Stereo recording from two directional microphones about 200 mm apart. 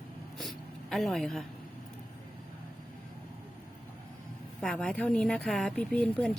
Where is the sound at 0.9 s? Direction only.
Centre (ahead or behind).